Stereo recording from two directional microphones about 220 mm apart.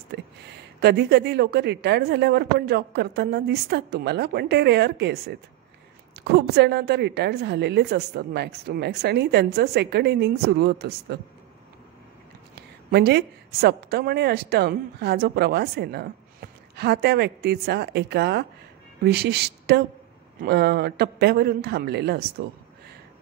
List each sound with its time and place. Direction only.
0.1 s a woman's voice: 50° right (ahead or behind)
12.5 s a woman's voice: 50° right (ahead or behind)